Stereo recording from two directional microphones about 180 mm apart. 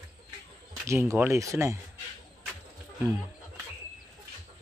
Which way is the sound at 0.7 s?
15° right (ahead or behind).